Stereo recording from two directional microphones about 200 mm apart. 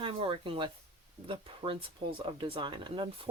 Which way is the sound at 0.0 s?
25° right (ahead or behind).